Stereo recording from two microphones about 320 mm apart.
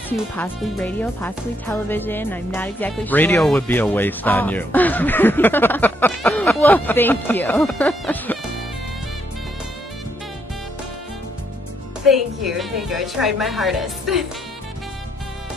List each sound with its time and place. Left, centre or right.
0.4 s speech: centre
12.1 s speech: centre